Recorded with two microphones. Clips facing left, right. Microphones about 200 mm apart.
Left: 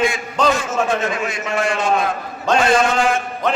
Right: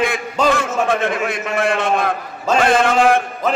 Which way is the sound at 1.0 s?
55° right (ahead or behind).